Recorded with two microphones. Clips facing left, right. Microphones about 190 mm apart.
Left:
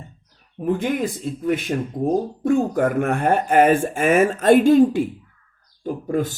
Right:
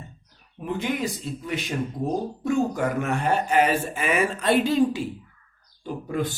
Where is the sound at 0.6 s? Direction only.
50° left (ahead or behind).